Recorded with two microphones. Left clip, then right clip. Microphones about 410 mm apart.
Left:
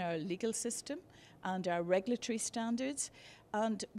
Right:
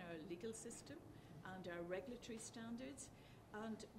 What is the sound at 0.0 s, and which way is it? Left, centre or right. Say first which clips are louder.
A woman's voice: left 14 dB; left.